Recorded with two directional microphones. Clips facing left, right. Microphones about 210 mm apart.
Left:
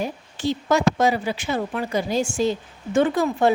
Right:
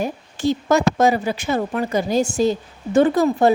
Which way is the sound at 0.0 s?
45° right (ahead or behind).